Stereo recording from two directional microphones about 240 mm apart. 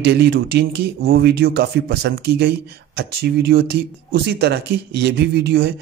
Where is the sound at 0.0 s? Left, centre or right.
Right.